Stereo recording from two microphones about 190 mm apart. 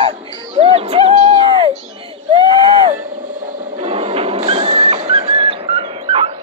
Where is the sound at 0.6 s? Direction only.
30° right (ahead or behind).